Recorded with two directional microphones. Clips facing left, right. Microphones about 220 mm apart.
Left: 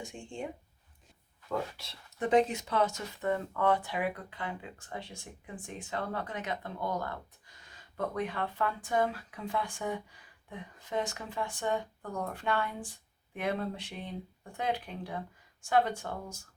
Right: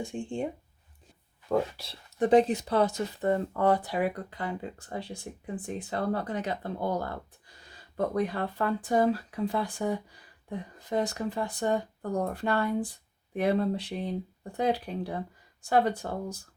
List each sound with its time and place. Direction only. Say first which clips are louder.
0.0 s speech: right 8 dB; 30° right (ahead or behind)
1.5 s speech: right 7 dB; 35° right (ahead or behind)